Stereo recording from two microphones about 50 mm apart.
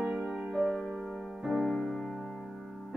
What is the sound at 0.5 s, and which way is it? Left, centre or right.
Music, centre.